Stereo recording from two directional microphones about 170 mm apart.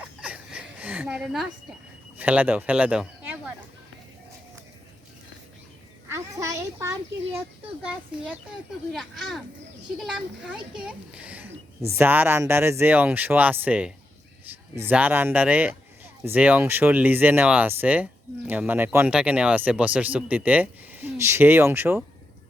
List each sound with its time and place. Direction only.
0.2 s a sound: 10° right (ahead or behind)
2.1 s speech: 10° right (ahead or behind)
6.1 s a child's voice: 20° right (ahead or behind)
7.9 s speech: 5° right (ahead or behind)